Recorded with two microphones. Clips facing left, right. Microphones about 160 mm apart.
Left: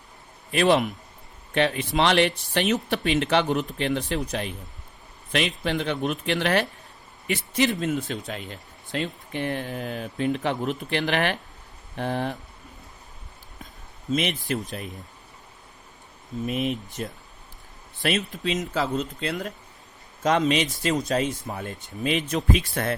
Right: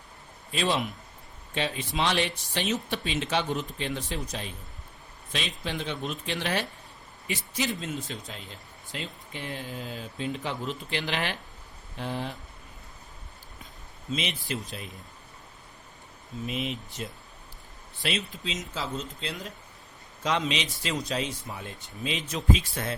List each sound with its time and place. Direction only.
0.5 s speech: 65° left (ahead or behind)
14.1 s a man's voice: 55° left (ahead or behind)
16.5 s a man's voice: 50° left (ahead or behind)
20.2 s a man's voice: 50° left (ahead or behind)